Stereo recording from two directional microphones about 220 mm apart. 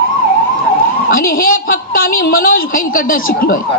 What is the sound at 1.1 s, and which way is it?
A woman's voice, 40° left (ahead or behind).